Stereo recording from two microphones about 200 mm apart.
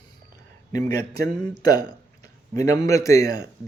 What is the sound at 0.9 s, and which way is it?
Speech, 20° left (ahead or behind).